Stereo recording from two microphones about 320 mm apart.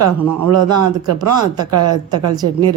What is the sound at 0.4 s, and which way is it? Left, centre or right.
A man's voice, right.